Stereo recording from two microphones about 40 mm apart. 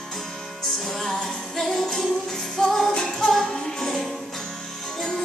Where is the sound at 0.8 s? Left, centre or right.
Centre.